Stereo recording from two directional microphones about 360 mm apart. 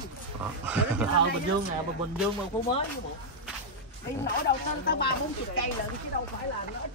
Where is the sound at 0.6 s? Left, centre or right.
Centre.